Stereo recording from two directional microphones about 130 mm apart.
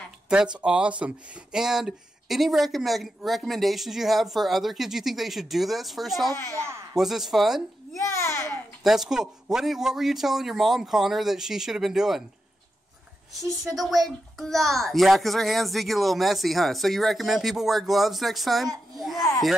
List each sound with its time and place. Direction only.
0.3 s speech: 5° right (ahead or behind)
6.3 s a child's voice: 20° left (ahead or behind)
6.6 s speech: 20° right (ahead or behind)
7.0 s speech: centre (ahead or behind)
8.0 s a child's voice: 25° left (ahead or behind)
8.8 s speech: centre (ahead or behind)
14.0 s speech: centre (ahead or behind)